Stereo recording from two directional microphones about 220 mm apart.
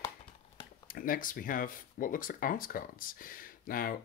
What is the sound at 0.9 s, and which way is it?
Speech, 40° left (ahead or behind).